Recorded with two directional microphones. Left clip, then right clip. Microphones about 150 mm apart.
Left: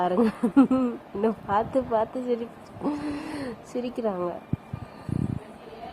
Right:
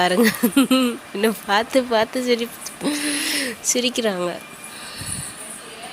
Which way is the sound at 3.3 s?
15° right (ahead or behind).